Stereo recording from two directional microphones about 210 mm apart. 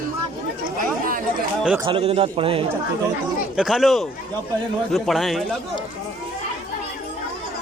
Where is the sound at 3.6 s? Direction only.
Centre (ahead or behind).